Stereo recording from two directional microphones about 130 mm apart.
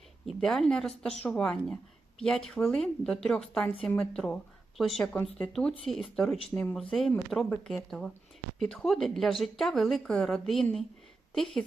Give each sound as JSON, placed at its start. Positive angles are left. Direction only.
{"t": 0.3, "sound": "speech", "side_deg": 5}
{"t": 6.5, "sound": "speech", "side_deg": 15}
{"t": 7.3, "sound": "speech", "side_deg": 5}